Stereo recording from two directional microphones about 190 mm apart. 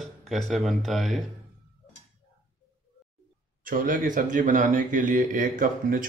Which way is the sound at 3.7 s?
45° right (ahead or behind).